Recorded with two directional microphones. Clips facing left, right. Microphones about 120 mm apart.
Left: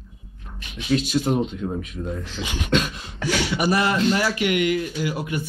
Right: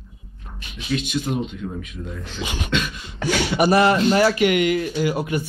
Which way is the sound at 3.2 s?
55° right (ahead or behind).